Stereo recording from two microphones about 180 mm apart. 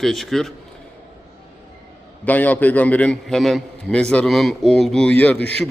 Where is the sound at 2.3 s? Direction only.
10° left (ahead or behind).